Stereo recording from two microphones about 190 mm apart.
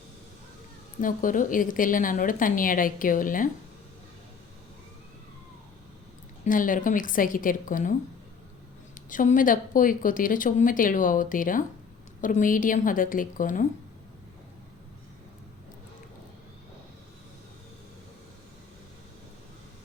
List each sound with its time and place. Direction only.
1.0 s speech: 45° left (ahead or behind)
6.4 s speech: 45° left (ahead or behind)
9.0 s speech: 45° left (ahead or behind)